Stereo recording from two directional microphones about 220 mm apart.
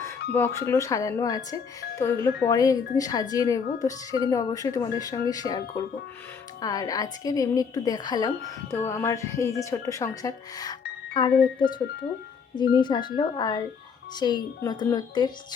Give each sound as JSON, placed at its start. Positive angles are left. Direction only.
{"t": 0.3, "sound": "a woman's voice", "side_deg": 10}
{"t": 12.8, "sound": "speech", "side_deg": 20}